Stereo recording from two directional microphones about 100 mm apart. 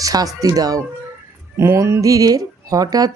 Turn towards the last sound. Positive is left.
turn(degrees=-40)  # may be behind; listen again after turning